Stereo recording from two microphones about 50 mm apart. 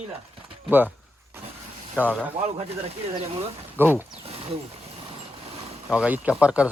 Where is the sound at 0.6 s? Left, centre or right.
Right.